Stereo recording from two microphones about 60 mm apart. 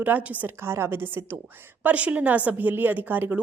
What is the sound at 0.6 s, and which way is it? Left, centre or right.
Speech, right.